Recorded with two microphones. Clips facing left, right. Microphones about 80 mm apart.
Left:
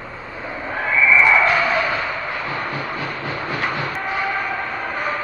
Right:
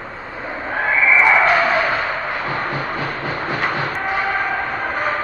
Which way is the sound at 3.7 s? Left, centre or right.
Centre.